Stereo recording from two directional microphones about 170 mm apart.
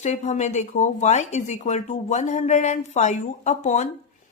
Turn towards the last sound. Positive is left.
turn(degrees=45)  # may be behind; listen again after turning